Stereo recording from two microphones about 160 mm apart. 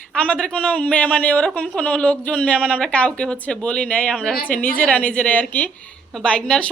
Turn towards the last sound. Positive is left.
turn(degrees=5)  # may be behind; listen again after turning